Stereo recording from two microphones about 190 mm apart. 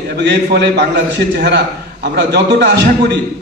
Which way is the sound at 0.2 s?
65° right (ahead or behind).